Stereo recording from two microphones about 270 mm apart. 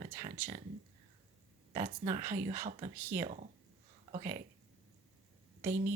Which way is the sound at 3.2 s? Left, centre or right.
Right.